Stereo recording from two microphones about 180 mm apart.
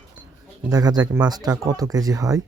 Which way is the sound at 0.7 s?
20° right (ahead or behind).